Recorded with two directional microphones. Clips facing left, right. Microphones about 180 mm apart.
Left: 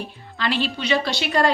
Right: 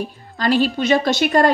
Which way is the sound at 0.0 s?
40° right (ahead or behind).